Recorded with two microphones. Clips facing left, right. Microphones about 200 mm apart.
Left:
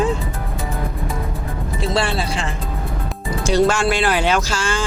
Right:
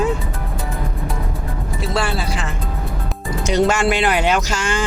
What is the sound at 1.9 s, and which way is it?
Music, 25° left (ahead or behind).